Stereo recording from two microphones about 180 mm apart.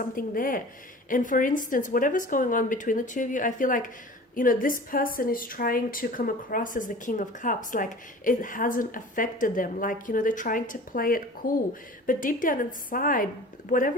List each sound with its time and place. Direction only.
0.2 s a woman's voice: 50° left (ahead or behind)